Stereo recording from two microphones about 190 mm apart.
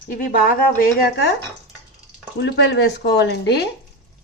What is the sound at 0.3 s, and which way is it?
Speech, 50° left (ahead or behind).